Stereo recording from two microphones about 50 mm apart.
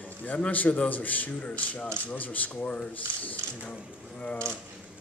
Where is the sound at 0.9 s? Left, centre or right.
Left.